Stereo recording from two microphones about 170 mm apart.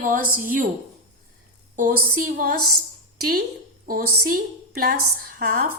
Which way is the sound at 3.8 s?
55° right (ahead or behind).